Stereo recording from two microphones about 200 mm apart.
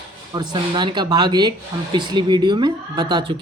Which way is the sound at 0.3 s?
20° right (ahead or behind).